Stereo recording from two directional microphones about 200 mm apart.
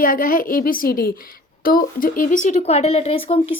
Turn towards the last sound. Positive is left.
turn(degrees=30)  # may be behind; listen again after turning